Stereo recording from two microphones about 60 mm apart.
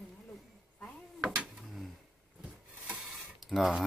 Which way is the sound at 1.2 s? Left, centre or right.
Centre.